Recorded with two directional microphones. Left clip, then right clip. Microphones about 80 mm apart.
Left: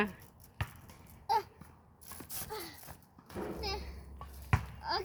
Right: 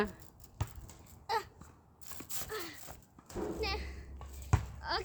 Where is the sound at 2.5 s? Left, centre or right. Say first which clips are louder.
Right 2 dB; centre.